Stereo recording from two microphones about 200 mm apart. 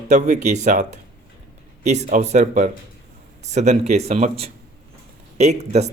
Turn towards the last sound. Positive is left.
turn(degrees=-35)  # may be behind; listen again after turning